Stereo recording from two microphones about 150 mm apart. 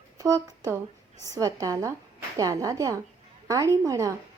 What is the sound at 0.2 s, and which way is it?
Speech, 20° right (ahead or behind).